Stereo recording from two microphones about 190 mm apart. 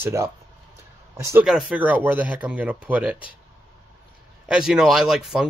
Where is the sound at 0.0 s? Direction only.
15° right (ahead or behind).